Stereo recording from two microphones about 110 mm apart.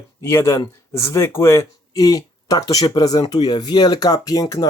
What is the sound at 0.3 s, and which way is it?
Speech, 25° left (ahead or behind).